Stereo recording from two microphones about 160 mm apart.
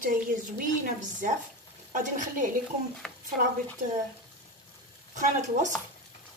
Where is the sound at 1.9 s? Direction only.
55° right (ahead or behind).